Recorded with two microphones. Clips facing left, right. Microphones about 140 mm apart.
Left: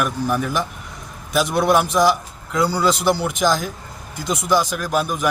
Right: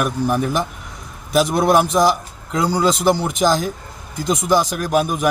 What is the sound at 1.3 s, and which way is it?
A man's voice, 40° right (ahead or behind).